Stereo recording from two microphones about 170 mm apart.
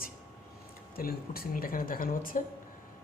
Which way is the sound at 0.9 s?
60° left (ahead or behind).